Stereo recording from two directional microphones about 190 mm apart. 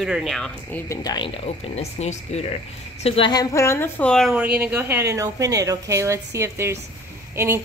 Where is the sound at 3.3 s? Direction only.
15° left (ahead or behind).